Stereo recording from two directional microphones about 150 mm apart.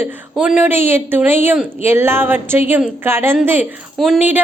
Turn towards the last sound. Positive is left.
turn(degrees=0)  # may be behind; listen again after turning